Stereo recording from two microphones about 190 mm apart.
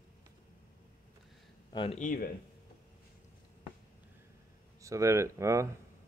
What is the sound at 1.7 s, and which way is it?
Speech, 25° left (ahead or behind).